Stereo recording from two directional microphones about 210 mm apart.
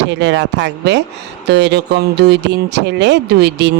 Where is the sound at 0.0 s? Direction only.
55° right (ahead or behind).